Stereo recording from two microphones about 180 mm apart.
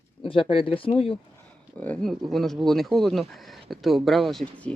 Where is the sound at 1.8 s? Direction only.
5° left (ahead or behind).